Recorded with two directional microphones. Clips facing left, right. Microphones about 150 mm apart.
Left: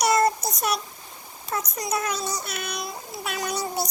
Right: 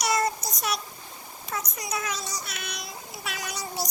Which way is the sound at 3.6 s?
60° left (ahead or behind).